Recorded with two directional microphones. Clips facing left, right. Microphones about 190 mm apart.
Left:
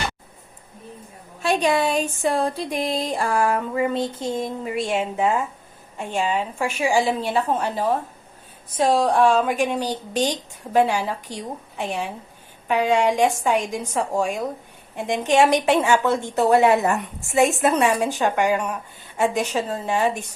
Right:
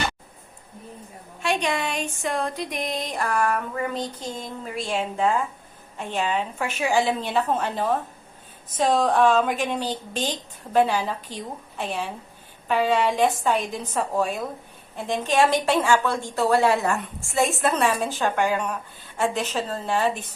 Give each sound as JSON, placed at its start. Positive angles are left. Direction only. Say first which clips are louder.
{"t": 1.4, "sound": "speech", "louder": "left 5 dB", "side_deg": 35}
{"t": 3.9, "sound": "a sound", "louder": "left 6 dB", "side_deg": 25}
{"t": 4.9, "sound": "a woman's voice", "louder": "even", "side_deg": 5}